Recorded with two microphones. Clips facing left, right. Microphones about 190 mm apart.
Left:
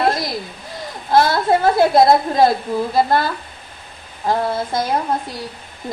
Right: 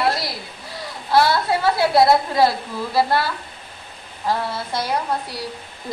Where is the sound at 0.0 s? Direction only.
50° left (ahead or behind).